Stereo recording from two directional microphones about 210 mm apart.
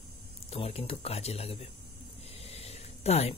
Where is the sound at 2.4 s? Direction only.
30° left (ahead or behind).